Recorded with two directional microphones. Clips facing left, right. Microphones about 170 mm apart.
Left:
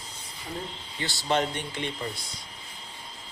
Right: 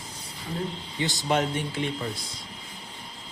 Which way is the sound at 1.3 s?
5° right (ahead or behind).